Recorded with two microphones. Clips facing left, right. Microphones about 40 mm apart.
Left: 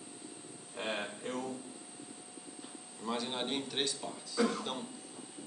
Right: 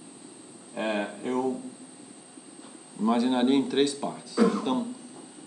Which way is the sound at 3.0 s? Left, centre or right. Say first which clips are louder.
Right 13 dB; right.